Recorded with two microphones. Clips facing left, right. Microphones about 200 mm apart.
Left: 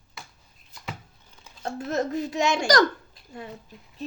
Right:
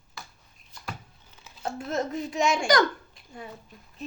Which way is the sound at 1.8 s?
40° left (ahead or behind).